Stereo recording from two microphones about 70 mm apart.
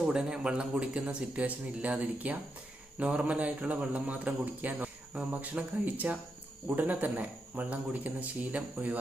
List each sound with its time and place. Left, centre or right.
0.0 s speech: centre